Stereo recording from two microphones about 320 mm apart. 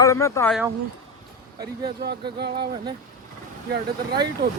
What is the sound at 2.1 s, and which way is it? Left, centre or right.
Speech, right.